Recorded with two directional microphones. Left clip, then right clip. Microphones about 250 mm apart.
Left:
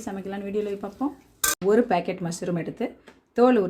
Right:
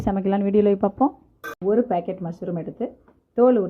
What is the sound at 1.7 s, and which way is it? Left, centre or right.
Speech, centre.